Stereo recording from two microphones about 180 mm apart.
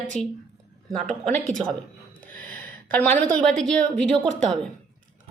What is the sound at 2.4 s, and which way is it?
A woman's voice, 10° left (ahead or behind).